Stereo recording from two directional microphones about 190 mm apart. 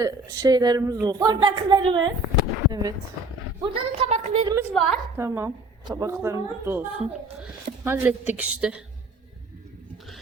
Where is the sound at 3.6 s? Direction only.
35° right (ahead or behind).